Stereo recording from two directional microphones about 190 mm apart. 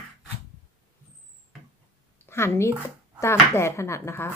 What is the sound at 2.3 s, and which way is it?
A woman's voice, 15° left (ahead or behind).